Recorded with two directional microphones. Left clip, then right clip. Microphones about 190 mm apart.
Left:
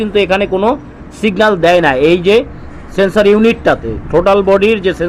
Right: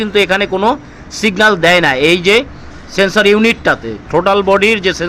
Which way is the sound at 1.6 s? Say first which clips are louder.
Left 1 dB; 35° right (ahead or behind).